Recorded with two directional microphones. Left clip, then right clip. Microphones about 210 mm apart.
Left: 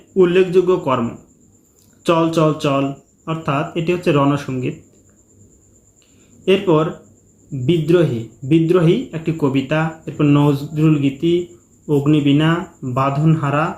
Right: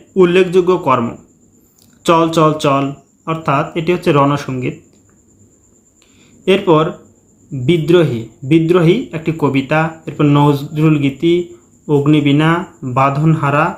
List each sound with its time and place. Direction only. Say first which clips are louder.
0.1 s speech: right 3 dB; 25° right (ahead or behind)
2.0 s speech: right 4 dB; 20° right (ahead or behind)
6.4 s speech: right 3 dB; 20° right (ahead or behind)